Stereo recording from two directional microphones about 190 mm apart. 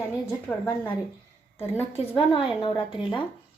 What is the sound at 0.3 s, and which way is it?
Speech, 10° left (ahead or behind).